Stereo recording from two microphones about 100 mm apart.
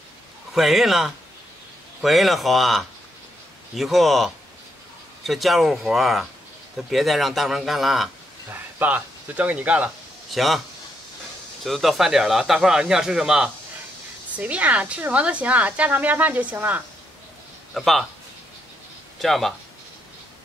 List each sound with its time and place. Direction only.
0.6 s speech: centre (ahead or behind)
8.5 s speech: 20° right (ahead or behind)
10.3 s speech: centre (ahead or behind)
11.6 s a woman's voice: centre (ahead or behind); by 16.8 s 15° right (ahead or behind)
17.7 s speech: centre (ahead or behind)
19.1 s speech: centre (ahead or behind)